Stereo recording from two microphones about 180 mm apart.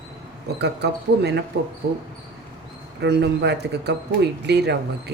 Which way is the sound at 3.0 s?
70° right (ahead or behind).